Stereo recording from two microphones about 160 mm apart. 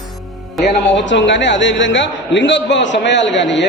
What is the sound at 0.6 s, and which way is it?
Speech, 90° left.